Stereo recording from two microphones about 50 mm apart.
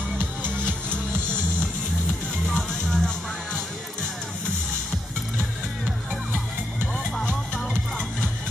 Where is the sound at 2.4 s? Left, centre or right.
Centre.